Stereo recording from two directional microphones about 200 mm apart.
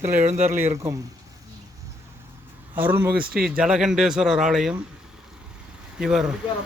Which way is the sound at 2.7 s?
10° right (ahead or behind).